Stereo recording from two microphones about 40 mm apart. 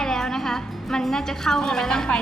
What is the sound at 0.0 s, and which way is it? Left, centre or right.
Music, centre.